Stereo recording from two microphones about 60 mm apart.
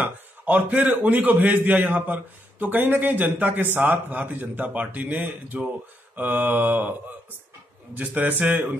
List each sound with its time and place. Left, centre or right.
0.0 s a man's voice: right